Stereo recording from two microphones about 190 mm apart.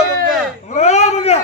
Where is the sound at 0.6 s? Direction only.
35° left (ahead or behind).